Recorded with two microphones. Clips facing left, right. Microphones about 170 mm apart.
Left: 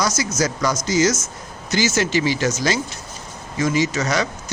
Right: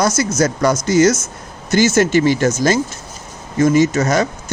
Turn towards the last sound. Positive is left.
turn(degrees=-50)  # may be behind; listen again after turning